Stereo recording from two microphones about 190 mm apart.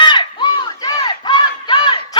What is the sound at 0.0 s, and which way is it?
Crowd, 25° left (ahead or behind).